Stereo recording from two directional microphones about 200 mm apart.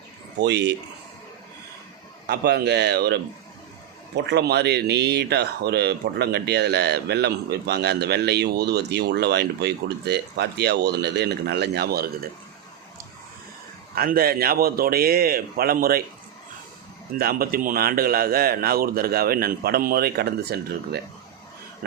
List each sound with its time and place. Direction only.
0.3 s speech: 60° right (ahead or behind)
2.2 s speech: 55° right (ahead or behind)
13.9 s a man's voice: 50° right (ahead or behind)
17.2 s a man's voice: 50° right (ahead or behind)